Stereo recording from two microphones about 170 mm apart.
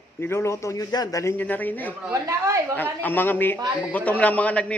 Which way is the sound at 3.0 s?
10° left (ahead or behind).